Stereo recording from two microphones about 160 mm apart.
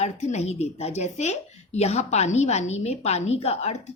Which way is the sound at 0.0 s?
45° left (ahead or behind).